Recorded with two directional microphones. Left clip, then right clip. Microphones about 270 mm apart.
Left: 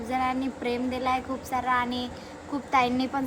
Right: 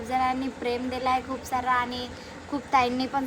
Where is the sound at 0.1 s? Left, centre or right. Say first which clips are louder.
Right 2 dB; centre.